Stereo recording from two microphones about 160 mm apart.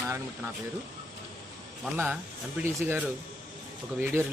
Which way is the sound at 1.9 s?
15° right (ahead or behind).